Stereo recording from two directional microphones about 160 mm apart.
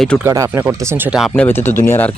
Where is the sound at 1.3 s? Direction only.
15° left (ahead or behind).